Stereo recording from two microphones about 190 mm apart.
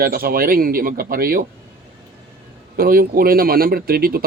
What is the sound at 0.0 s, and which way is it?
Speech, 50° right (ahead or behind).